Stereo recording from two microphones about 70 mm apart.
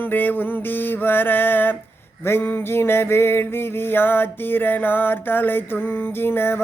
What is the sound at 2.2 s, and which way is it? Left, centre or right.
Music, left.